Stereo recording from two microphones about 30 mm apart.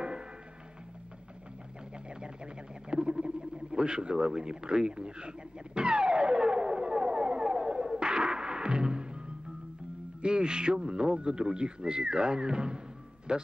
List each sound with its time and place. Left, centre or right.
2.0 s a sound: right
8.0 s music: right
10.2 s speech: right